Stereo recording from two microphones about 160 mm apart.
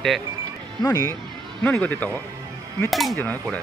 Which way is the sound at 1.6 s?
10° left (ahead or behind).